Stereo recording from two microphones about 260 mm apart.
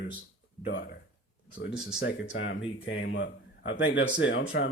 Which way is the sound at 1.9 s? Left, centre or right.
Left.